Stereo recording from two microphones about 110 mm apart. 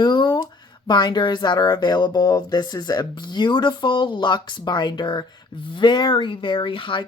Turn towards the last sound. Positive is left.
turn(degrees=50)  # may be behind; listen again after turning